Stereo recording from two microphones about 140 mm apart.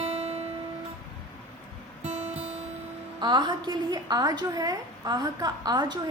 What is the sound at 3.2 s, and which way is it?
A woman's voice, 30° right (ahead or behind).